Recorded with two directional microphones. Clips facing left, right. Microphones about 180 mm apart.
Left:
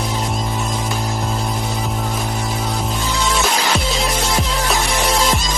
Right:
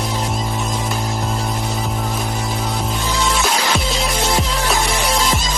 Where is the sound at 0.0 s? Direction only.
Centre (ahead or behind).